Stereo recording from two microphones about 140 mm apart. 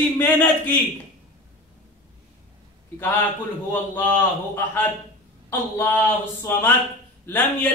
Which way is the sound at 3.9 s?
15° left (ahead or behind).